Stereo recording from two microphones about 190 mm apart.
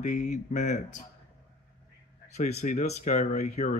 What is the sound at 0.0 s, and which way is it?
Speech, 40° left (ahead or behind).